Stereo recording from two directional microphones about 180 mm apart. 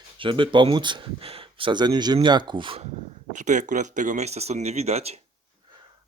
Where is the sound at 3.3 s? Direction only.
45° right (ahead or behind).